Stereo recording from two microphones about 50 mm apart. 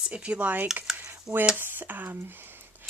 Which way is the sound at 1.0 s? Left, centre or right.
Right.